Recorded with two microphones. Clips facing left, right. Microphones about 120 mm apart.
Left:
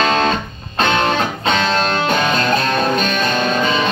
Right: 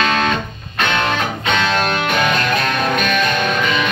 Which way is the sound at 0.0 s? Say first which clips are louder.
Left 2 dB; 30° left (ahead or behind).